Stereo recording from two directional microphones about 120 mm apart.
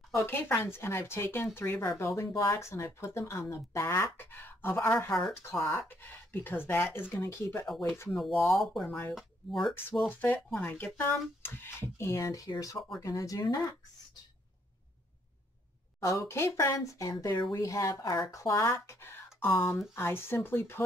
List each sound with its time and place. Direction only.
0.1 s speech: 20° left (ahead or behind)
8.1 s speech: centre (ahead or behind)
8.8 s speech: 15° left (ahead or behind)
9.1 s speech: centre (ahead or behind)
10.0 s speech: 15° left (ahead or behind); by 13.7 s 30° left (ahead or behind)
16.0 s speech: 25° left (ahead or behind)